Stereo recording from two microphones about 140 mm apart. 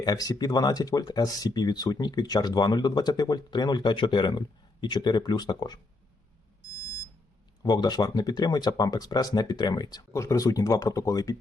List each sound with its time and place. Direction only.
0.0 s speech: 30° left (ahead or behind)
7.6 s speech: 30° left (ahead or behind)